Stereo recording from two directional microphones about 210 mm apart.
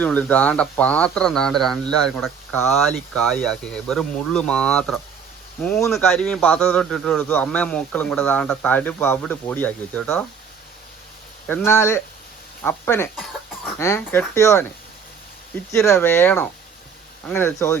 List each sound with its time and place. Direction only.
0.0 s speech: 5° left (ahead or behind)
11.4 s speech: 10° left (ahead or behind)
15.7 s speech: 10° left (ahead or behind)